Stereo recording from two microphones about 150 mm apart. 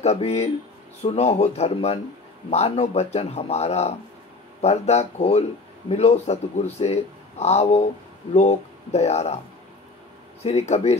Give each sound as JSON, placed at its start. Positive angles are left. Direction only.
{"t": 0.0, "sound": "speech", "side_deg": 45}
{"t": 10.4, "sound": "speech", "side_deg": 45}